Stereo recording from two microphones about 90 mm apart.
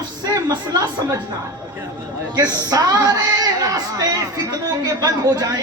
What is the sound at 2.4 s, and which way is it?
Speech, 45° right (ahead or behind).